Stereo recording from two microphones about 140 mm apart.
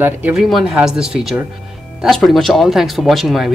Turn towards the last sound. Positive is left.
turn(degrees=0)  # may be behind; listen again after turning